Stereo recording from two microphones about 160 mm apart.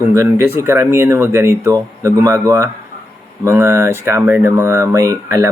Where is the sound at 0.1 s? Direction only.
15° right (ahead or behind).